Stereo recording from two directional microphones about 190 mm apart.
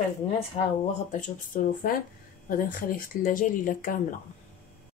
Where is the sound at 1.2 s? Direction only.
45° left (ahead or behind).